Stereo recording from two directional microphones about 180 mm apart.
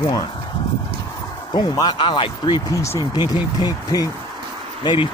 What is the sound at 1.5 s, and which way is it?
Speech, 25° left (ahead or behind).